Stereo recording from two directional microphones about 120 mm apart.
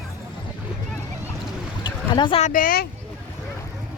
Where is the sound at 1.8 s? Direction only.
40° left (ahead or behind).